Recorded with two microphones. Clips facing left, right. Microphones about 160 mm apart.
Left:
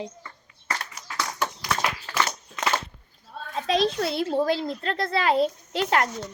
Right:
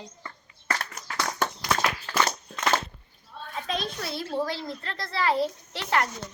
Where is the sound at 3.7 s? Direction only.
75° left (ahead or behind).